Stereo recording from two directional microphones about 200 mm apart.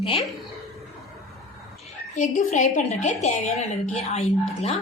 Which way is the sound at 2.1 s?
40° left (ahead or behind).